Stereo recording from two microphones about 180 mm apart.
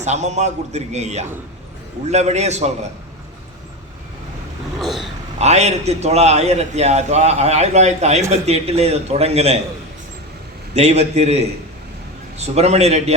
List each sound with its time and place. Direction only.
0.0 s a man's voice: 40° right (ahead or behind)
4.8 s a sound: centre (ahead or behind)
5.4 s a man's voice: 40° right (ahead or behind)
10.8 s a man's voice: 35° right (ahead or behind)